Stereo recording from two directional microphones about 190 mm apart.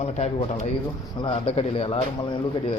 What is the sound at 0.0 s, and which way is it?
Speech, 35° left (ahead or behind).